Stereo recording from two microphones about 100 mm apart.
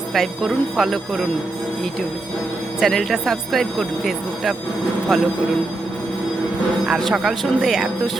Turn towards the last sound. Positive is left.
turn(degrees=-5)  # may be behind; listen again after turning